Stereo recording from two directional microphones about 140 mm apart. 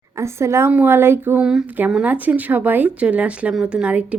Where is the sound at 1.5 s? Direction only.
5° right (ahead or behind).